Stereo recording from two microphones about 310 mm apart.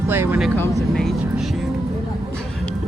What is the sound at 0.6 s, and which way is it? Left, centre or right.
Vehicle, centre.